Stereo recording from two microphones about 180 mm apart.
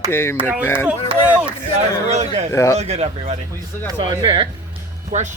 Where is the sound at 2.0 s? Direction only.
40° right (ahead or behind).